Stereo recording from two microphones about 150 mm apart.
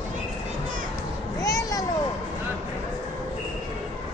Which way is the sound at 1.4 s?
20° left (ahead or behind).